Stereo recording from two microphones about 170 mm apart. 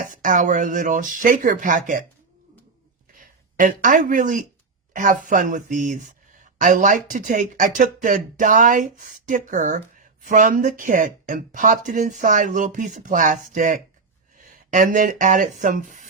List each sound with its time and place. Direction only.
0.0 s speech: 50° right (ahead or behind)
3.2 s speech: 55° right (ahead or behind)